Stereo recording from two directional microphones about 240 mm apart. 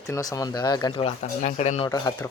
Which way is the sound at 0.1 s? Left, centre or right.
Centre.